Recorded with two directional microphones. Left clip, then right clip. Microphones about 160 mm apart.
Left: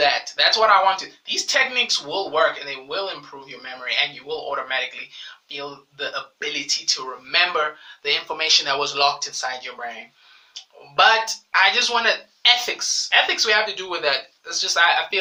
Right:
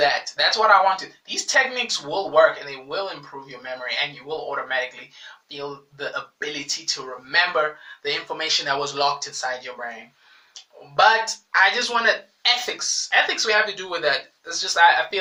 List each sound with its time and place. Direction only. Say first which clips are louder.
0.0 s speech: left 1 dB; 10° left (ahead or behind)
10.9 s speech: left 1 dB; 15° left (ahead or behind)